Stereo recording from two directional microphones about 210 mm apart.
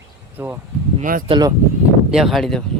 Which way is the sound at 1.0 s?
40° right (ahead or behind).